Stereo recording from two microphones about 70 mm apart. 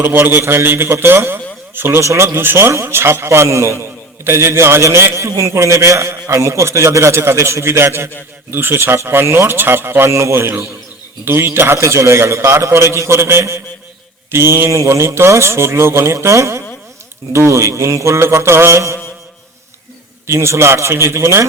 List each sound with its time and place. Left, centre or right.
0.0 s a man's voice: right
2.0 s a man's voice: right
17.3 s mantra: right
20.2 s a man's voice: right